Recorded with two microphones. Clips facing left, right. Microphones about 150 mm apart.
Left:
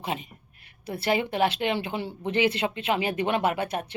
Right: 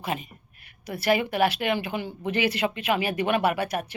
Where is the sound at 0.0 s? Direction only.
25° left (ahead or behind).